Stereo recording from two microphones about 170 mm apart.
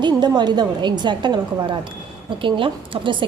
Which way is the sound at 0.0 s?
25° right (ahead or behind).